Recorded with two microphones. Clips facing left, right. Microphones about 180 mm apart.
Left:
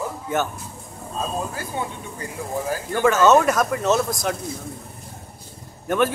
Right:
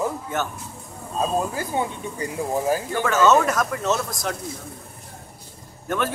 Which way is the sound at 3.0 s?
15° left (ahead or behind).